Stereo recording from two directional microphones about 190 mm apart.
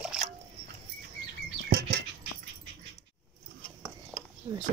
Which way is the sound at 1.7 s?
55° right (ahead or behind).